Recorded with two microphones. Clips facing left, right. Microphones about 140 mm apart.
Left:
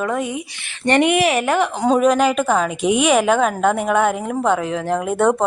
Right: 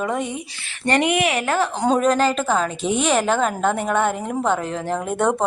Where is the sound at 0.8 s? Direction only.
25° left (ahead or behind).